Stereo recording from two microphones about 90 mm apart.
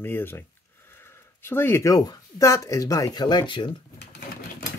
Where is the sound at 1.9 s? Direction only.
40° left (ahead or behind); by 3.7 s 60° left (ahead or behind).